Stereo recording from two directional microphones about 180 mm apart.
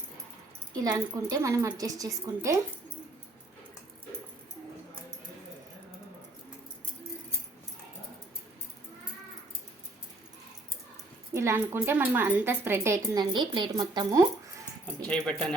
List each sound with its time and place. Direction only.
0.7 s a woman's voice: 20° right (ahead or behind)
11.3 s a woman's voice: 15° right (ahead or behind)
15.0 s speech: 5° left (ahead or behind)